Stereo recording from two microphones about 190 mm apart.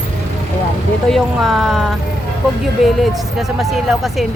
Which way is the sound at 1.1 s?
Centre (ahead or behind).